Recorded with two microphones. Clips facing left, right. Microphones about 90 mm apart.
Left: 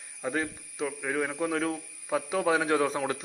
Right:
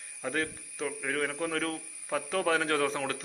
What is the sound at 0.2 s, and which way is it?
A man's voice, 10° left (ahead or behind).